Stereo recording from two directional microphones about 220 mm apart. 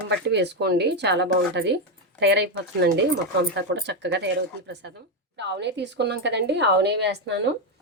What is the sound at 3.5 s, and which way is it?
A woman's voice, 50° right (ahead or behind).